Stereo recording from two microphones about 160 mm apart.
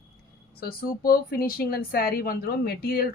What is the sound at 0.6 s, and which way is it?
Speech, 70° left (ahead or behind).